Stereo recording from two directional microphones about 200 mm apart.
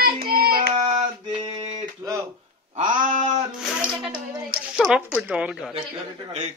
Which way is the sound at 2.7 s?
35° right (ahead or behind).